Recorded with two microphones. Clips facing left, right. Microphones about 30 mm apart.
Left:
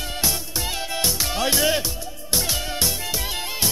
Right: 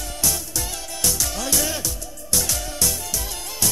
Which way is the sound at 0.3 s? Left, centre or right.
Left.